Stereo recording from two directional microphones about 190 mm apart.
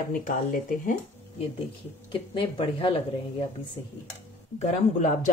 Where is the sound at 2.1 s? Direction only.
30° left (ahead or behind).